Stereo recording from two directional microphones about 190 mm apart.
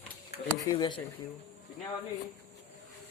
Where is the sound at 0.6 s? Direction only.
20° left (ahead or behind).